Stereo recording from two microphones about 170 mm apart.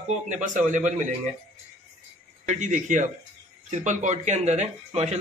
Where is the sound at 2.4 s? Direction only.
45° right (ahead or behind).